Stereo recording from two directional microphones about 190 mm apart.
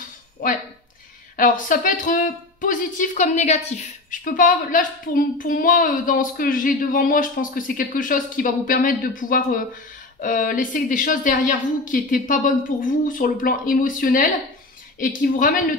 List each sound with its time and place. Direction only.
0.4 s a woman's voice: 45° left (ahead or behind)